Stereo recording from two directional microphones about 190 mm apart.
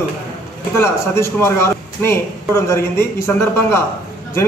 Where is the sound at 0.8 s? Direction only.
15° left (ahead or behind).